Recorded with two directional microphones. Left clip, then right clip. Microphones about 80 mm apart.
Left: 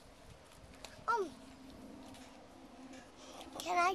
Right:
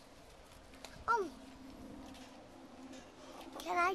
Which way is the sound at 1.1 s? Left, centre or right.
Left.